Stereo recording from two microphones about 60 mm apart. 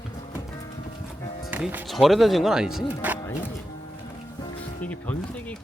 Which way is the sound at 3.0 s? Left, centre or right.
Right.